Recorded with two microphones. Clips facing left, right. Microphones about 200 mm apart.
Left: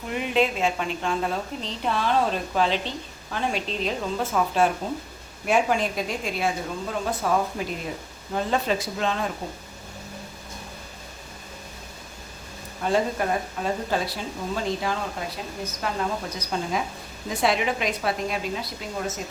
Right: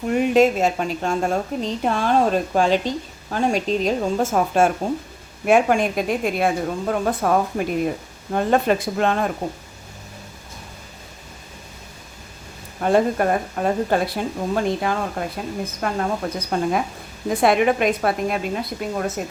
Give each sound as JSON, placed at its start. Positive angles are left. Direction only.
{"t": 0.1, "sound": "a woman's voice", "side_deg": -45}
{"t": 12.8, "sound": "a woman's voice", "side_deg": -55}